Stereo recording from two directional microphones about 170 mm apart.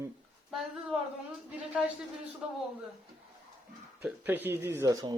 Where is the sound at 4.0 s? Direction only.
10° right (ahead or behind).